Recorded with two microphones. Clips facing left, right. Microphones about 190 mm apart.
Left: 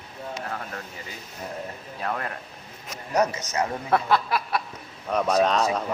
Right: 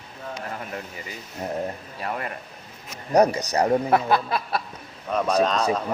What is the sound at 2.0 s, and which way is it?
Speech, 5° right (ahead or behind).